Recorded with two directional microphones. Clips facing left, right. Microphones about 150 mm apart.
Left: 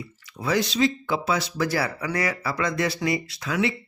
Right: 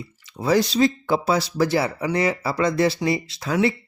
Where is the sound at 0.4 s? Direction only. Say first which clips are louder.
Right 4 dB; 35° right (ahead or behind).